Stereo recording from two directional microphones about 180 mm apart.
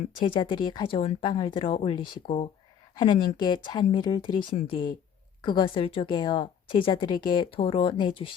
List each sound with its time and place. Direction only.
0.3 s speech: 25° left (ahead or behind)